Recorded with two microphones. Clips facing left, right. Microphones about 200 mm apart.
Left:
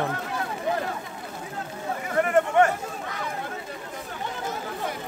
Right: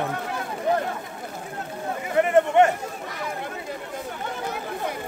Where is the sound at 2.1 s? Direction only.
20° right (ahead or behind).